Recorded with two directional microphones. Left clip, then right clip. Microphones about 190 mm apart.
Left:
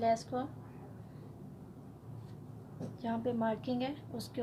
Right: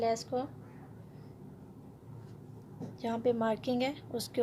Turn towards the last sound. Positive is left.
turn(degrees=-45)  # may be behind; listen again after turning